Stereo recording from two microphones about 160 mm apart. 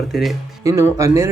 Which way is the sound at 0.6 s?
20° right (ahead or behind).